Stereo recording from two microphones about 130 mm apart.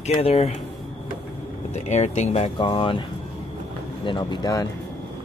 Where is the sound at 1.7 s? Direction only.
65° left (ahead or behind).